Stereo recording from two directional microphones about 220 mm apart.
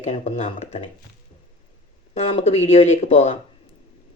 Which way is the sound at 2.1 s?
30° left (ahead or behind).